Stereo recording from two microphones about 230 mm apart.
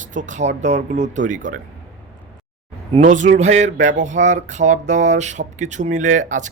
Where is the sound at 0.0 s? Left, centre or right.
Right.